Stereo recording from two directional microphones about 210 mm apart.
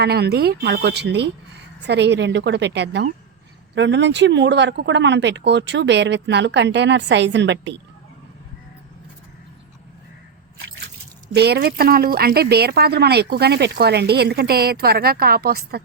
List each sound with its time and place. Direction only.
0.0 s a woman's voice: 50° right (ahead or behind)
11.3 s a woman's voice: 50° right (ahead or behind)